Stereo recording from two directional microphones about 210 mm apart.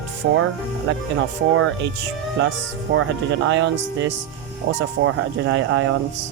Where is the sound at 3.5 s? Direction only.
60° right (ahead or behind).